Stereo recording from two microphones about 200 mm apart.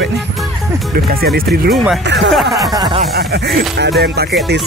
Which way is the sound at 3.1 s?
50° right (ahead or behind).